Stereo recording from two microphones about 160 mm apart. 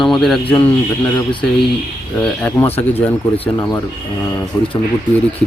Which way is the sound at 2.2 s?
10° left (ahead or behind).